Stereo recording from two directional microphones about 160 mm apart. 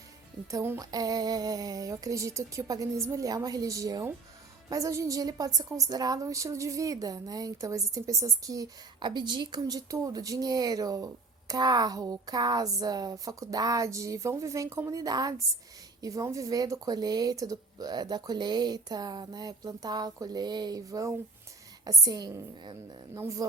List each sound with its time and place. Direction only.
0.5 s a woman's voice: 15° right (ahead or behind)